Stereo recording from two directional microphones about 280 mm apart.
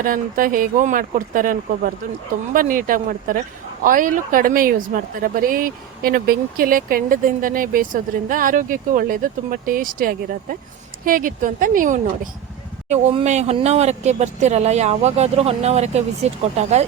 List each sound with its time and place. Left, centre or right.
0.0 s speech: right